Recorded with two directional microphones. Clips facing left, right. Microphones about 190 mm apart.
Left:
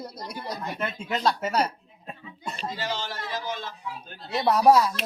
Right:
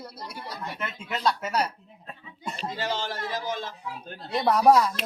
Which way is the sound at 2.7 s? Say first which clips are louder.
Right 3 dB; 50° right (ahead or behind).